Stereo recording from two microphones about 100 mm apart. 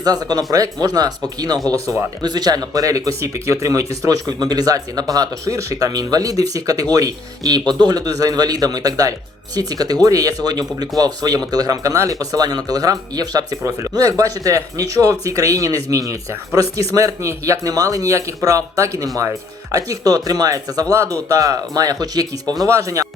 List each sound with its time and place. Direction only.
0.0 s speech: 40° right (ahead or behind)